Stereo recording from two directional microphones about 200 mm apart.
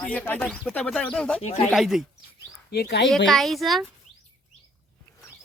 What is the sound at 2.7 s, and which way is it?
Speech, 55° left (ahead or behind).